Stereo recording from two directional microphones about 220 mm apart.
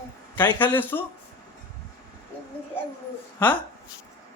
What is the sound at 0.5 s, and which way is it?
Speech, 10° left (ahead or behind).